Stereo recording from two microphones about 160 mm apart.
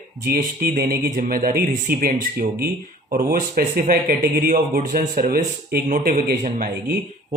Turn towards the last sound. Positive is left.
turn(degrees=-70)  # may be behind; listen again after turning